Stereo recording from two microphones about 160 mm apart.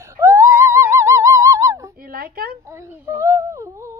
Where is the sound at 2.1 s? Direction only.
70° right (ahead or behind).